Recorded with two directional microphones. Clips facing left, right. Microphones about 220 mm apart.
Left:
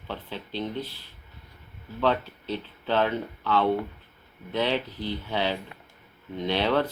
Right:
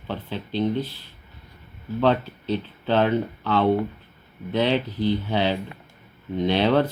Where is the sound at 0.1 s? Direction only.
20° right (ahead or behind).